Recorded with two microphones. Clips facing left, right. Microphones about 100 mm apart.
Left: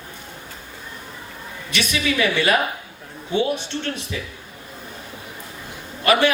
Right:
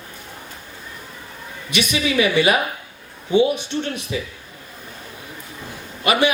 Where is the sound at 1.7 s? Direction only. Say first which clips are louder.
Right 3 dB; 15° right (ahead or behind).